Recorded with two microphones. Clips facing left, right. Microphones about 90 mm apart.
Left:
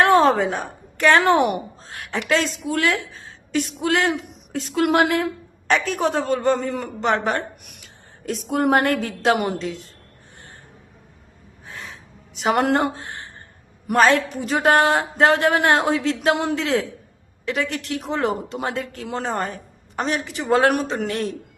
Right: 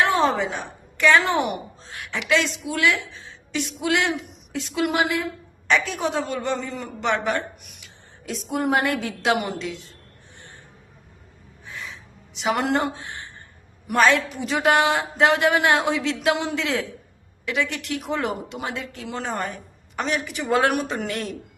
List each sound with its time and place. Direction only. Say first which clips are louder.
0.0 s a woman's voice: left 5 dB; 45° left (ahead or behind)
5.7 s a woman's voice: left 2 dB; 45° left (ahead or behind)
7.0 s speech: left 2 dB; 40° left (ahead or behind)
7.6 s a sound: left 2 dB; 50° left (ahead or behind)
8.4 s a woman's voice: left 4 dB; 55° left (ahead or behind); by 9.8 s 40° left (ahead or behind)
11.6 s a sound: even; 45° left (ahead or behind)
13.8 s speech: left 2 dB; 40° left (ahead or behind)